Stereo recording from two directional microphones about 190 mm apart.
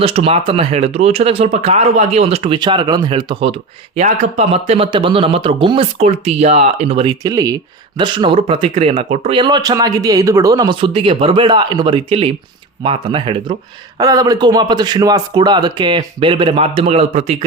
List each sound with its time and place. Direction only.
0.0 s speech: 30° right (ahead or behind)